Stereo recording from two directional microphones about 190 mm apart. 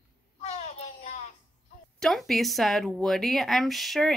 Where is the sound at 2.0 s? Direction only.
Centre (ahead or behind).